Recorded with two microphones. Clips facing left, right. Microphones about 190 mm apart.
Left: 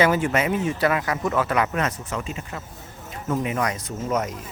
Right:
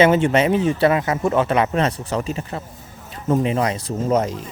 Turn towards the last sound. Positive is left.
turn(degrees=-30)  # may be behind; listen again after turning